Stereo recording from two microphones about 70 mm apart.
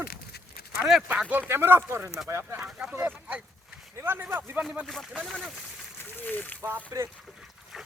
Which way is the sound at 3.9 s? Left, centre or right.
Right.